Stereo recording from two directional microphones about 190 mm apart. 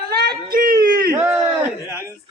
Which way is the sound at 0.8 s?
15° right (ahead or behind).